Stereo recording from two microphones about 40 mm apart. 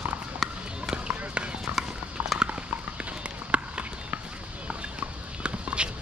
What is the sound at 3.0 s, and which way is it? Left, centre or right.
Run, right.